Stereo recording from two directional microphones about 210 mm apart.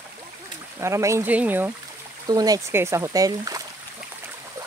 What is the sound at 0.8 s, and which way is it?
Speech, 15° right (ahead or behind).